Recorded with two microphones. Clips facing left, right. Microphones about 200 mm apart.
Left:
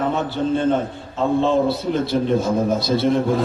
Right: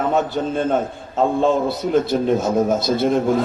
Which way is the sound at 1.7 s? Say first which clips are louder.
Right 2 dB; 50° right (ahead or behind).